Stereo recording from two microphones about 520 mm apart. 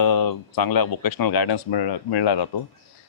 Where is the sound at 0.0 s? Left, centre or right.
Left.